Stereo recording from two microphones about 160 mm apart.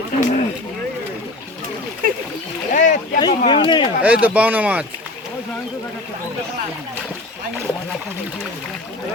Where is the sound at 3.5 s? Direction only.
30° left (ahead or behind).